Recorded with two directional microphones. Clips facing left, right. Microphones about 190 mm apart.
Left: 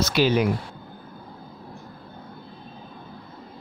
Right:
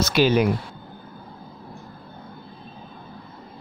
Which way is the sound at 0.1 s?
55° right (ahead or behind).